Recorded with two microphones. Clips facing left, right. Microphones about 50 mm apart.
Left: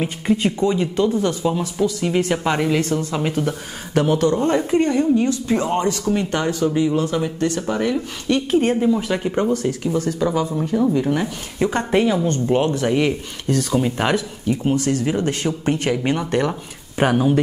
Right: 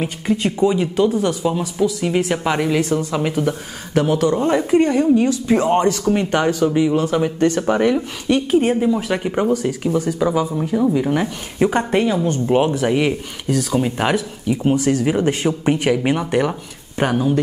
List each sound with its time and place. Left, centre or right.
0.0 s speech: centre
0.6 s speech: centre
4.3 s speech: centre
7.9 s speech: centre
11.9 s speech: centre
17.0 s speech: centre